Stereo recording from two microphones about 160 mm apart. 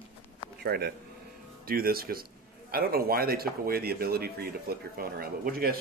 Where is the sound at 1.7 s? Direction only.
70° right (ahead or behind).